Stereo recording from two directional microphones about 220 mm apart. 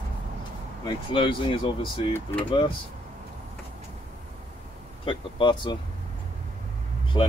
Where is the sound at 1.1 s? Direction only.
25° left (ahead or behind).